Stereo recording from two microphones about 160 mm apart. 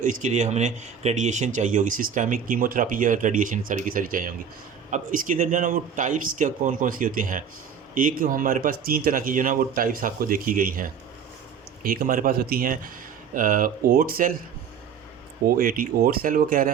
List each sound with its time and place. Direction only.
0.0 s speech: 50° right (ahead or behind)
15.4 s speech: 60° right (ahead or behind)